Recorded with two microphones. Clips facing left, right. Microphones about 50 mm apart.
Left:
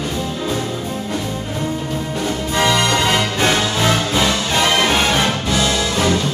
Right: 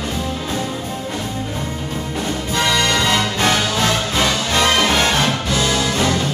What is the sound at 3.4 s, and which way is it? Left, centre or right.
Music, centre.